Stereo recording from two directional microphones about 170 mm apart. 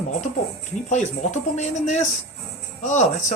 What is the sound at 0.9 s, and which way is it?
Speech, 45° left (ahead or behind).